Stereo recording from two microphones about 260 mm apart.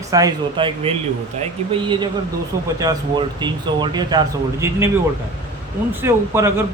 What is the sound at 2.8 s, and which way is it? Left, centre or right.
Speech, centre.